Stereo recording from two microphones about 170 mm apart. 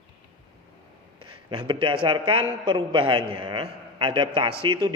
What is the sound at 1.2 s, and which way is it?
A man's voice, 30° right (ahead or behind).